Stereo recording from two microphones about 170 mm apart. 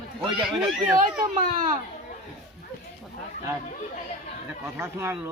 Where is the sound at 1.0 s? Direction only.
50° right (ahead or behind).